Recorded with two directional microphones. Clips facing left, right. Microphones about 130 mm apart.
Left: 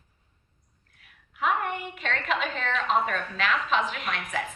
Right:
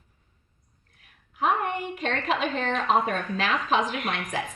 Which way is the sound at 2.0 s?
40° right (ahead or behind).